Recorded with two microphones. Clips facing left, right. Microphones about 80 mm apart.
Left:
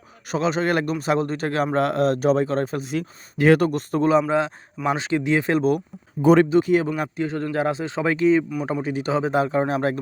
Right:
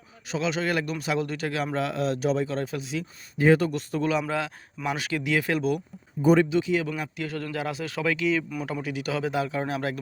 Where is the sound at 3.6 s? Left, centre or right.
Left.